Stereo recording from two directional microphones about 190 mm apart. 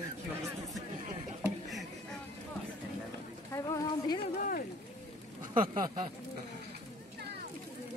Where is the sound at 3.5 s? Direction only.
20° left (ahead or behind).